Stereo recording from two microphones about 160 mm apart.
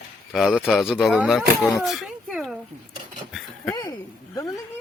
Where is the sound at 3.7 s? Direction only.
25° left (ahead or behind).